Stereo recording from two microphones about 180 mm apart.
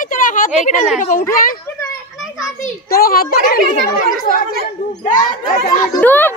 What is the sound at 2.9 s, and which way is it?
Speech, 55° left (ahead or behind).